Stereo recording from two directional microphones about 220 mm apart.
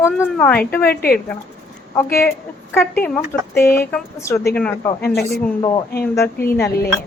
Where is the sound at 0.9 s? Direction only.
45° left (ahead or behind).